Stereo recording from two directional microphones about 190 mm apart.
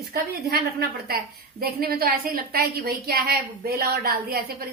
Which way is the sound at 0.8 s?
55° right (ahead or behind).